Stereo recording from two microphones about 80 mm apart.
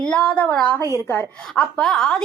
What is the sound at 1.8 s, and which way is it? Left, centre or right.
Speech, centre.